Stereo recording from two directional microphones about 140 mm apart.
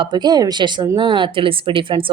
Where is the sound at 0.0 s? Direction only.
30° right (ahead or behind).